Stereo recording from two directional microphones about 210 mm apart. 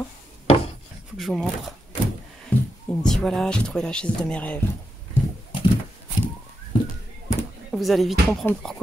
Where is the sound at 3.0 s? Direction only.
Centre (ahead or behind).